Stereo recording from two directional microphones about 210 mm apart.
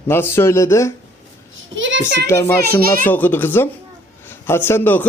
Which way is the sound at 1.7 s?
65° right (ahead or behind).